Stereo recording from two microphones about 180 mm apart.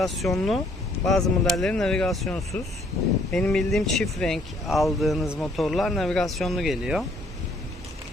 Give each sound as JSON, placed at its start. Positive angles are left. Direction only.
{"t": 0.0, "sound": "speech", "side_deg": 0}